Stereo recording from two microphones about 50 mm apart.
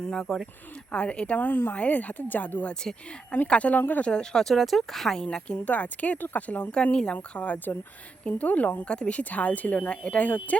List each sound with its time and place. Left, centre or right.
0.0 s speech: centre
0.9 s speech: left
1.4 s speech: left
1.7 s speech: left
4.0 s speech: centre
4.5 s speech: centre
5.2 s speech: centre
5.6 s speech: left
6.8 s speech: left